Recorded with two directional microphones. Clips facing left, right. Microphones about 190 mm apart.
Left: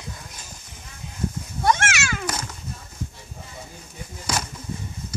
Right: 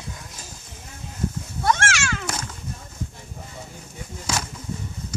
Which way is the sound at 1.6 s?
10° left (ahead or behind).